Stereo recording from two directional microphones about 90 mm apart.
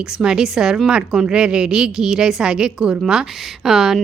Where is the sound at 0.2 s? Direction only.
5° right (ahead or behind).